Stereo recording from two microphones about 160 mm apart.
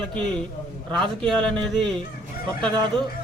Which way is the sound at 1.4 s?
5° left (ahead or behind).